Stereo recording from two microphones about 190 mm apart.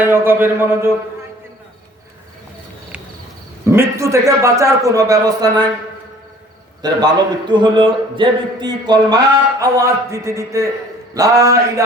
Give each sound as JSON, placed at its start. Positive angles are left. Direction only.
{"t": 0.0, "sound": "a man's voice", "side_deg": -10}
{"t": 3.6, "sound": "a man's voice", "side_deg": -15}
{"t": 6.8, "sound": "a man's voice", "side_deg": -20}